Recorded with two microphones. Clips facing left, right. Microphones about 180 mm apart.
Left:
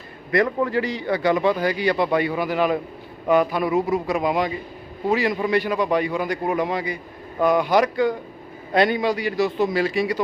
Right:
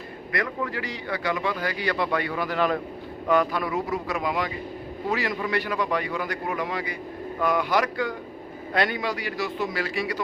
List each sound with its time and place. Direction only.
0.3 s a man's voice: 25° left (ahead or behind)